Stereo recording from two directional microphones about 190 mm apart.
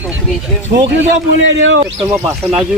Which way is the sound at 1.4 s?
75° right (ahead or behind).